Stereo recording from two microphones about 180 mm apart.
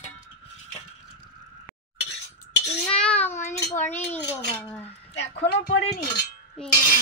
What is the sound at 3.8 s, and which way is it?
Speech, 10° left (ahead or behind).